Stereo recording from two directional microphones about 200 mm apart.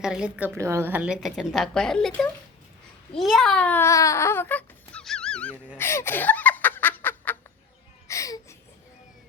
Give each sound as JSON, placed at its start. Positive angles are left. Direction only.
{"t": 0.0, "sound": "a woman's voice", "side_deg": -5}
{"t": 5.7, "sound": "laughter", "side_deg": 10}
{"t": 8.0, "sound": "a sound", "side_deg": 15}